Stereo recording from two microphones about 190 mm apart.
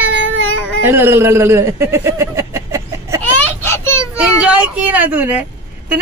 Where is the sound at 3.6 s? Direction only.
10° left (ahead or behind).